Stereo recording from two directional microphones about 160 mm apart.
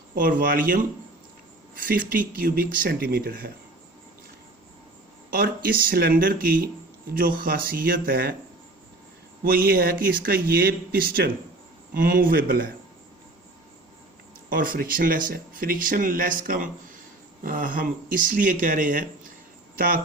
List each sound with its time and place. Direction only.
0.1 s speech: 60° right (ahead or behind)
5.3 s speech: 65° right (ahead or behind)
9.4 s speech: 70° right (ahead or behind)
14.5 s speech: 60° right (ahead or behind)